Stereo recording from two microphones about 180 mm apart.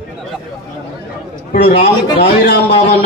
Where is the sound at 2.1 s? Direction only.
60° left (ahead or behind).